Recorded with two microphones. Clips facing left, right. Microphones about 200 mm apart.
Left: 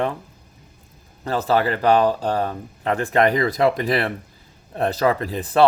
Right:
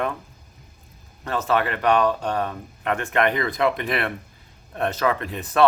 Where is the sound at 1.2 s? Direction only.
35° left (ahead or behind).